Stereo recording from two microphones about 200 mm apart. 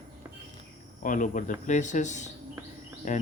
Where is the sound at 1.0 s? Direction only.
40° left (ahead or behind).